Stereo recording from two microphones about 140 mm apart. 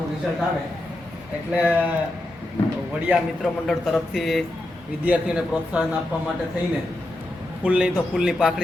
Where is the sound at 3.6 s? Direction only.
Centre (ahead or behind).